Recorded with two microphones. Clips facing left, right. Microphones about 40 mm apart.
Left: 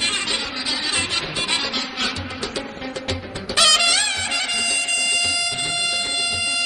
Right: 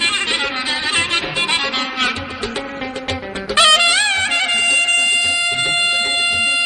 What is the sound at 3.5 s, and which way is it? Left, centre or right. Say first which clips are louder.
Music: right 5 dB; right.